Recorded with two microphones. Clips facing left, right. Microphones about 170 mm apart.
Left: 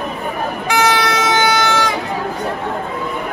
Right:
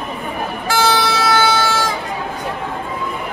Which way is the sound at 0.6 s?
15° left (ahead or behind).